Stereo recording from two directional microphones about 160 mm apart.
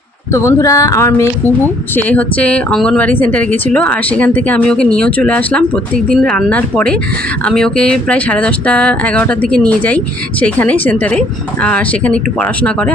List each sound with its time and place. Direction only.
0.3 s speech: 20° left (ahead or behind)